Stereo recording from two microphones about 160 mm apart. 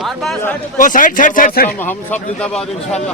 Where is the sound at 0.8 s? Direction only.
55° left (ahead or behind).